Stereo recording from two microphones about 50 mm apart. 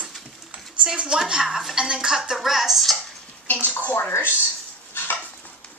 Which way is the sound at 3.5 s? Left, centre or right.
Left.